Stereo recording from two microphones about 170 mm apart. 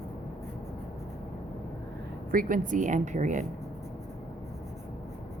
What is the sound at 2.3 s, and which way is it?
A woman's voice, 55° right (ahead or behind).